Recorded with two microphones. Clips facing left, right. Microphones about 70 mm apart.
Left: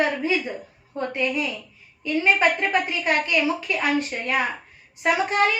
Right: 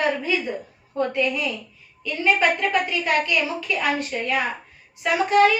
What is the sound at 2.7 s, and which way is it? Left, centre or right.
A woman's voice, left.